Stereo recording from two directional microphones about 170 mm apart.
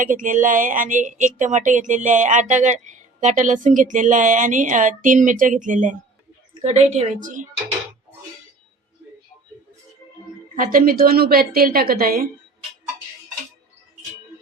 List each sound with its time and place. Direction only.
0.0 s speech: 50° right (ahead or behind)
10.5 s speech: 55° right (ahead or behind)